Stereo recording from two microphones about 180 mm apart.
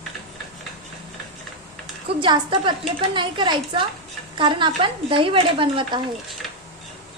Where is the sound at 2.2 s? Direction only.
25° right (ahead or behind).